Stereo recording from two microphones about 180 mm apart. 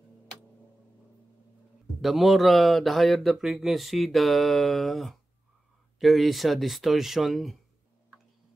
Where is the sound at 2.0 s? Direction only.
Centre (ahead or behind).